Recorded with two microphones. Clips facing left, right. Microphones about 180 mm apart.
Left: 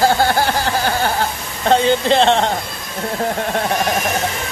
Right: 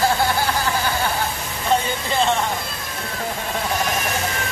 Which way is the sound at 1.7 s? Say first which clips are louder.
Left 8 dB; 85° left.